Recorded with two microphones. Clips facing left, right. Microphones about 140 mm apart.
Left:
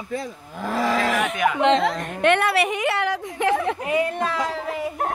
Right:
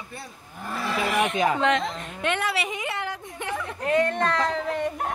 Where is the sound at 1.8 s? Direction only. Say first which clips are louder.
Left 8 dB; 70° left (ahead or behind); by 3.7 s 90° left.